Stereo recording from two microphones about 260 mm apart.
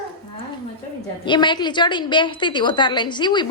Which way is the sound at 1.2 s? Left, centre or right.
Centre.